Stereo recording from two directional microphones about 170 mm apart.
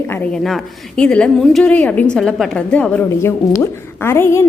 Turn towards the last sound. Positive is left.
turn(degrees=15)  # may be behind; listen again after turning